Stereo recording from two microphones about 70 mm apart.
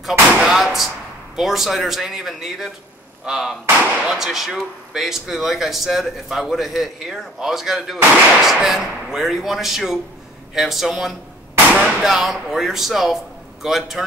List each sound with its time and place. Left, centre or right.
0.4 s speech: centre
11.5 s a sound: centre
12.0 s speech: centre